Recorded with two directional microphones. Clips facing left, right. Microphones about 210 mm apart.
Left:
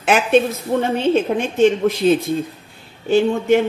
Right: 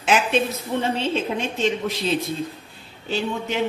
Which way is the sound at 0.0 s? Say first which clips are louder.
Left 6 dB; 55° left (ahead or behind).